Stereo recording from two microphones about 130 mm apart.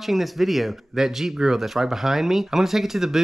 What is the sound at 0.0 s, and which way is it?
Speech, centre (ahead or behind).